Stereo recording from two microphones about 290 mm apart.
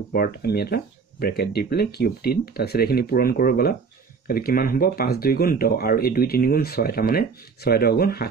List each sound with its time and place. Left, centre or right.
0.1 s speech: left